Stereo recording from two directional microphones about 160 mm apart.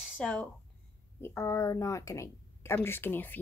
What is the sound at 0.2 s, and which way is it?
A woman's voice, 10° left (ahead or behind).